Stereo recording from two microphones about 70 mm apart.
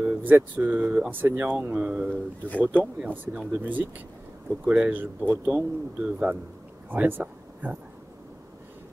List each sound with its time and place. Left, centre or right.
0.0 s speech: right
4.6 s speech: centre
4.9 s speech: right
6.9 s a sound: right